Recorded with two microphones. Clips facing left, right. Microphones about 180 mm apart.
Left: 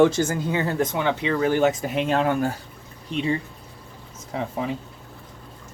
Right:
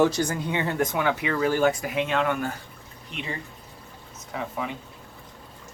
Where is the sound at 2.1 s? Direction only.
35° left (ahead or behind).